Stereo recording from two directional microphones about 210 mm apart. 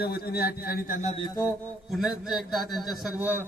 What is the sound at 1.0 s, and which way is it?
Music, 25° left (ahead or behind).